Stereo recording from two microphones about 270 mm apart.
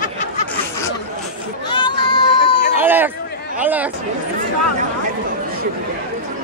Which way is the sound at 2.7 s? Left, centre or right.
Centre.